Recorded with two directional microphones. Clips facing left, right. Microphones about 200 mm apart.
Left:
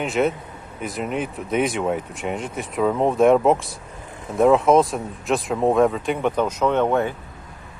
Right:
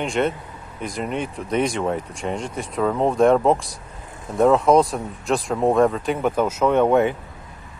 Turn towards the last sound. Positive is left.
turn(degrees=-10)  # may be behind; listen again after turning